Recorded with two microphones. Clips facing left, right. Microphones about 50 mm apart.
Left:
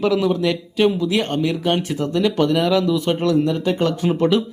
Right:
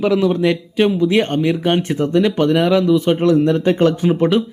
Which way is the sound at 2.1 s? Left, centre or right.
Centre.